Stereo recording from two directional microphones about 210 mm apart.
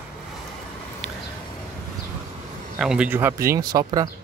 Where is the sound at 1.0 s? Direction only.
Centre (ahead or behind).